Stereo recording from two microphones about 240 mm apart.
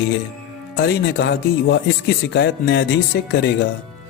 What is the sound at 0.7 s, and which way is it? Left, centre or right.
A man's voice, left.